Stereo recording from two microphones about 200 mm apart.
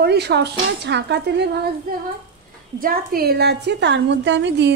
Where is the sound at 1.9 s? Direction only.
50° right (ahead or behind).